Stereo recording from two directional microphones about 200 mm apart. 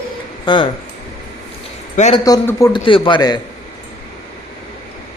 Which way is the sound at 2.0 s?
35° left (ahead or behind).